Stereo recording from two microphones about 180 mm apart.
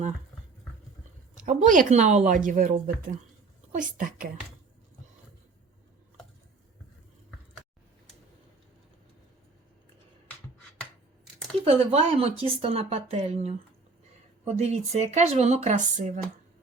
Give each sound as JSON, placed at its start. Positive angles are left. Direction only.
{"t": 1.5, "sound": "a woman's voice", "side_deg": -45}
{"t": 11.6, "sound": "speech", "side_deg": -35}